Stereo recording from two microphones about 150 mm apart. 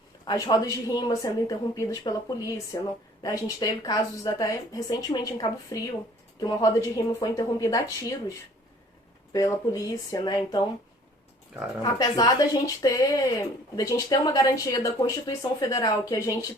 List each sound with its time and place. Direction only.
0.3 s speech: 25° left (ahead or behind)
9.3 s speech: 20° left (ahead or behind)
11.8 s speech: 25° left (ahead or behind)